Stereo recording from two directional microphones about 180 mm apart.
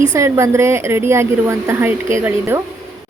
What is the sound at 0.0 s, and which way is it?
A woman's voice, 15° right (ahead or behind).